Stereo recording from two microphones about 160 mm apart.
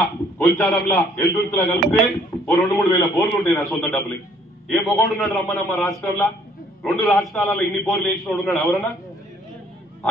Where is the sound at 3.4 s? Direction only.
10° left (ahead or behind).